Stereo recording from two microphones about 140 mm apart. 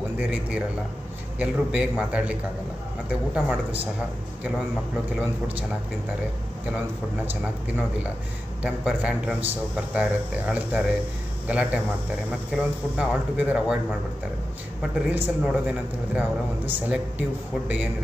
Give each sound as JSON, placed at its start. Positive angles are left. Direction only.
{"t": 0.2, "sound": "a man's voice", "side_deg": -10}
{"t": 3.3, "sound": "a man's voice", "side_deg": -10}
{"t": 8.6, "sound": "a man's voice", "side_deg": -5}
{"t": 12.9, "sound": "a man's voice", "side_deg": -10}
{"t": 14.8, "sound": "a man's voice", "side_deg": -10}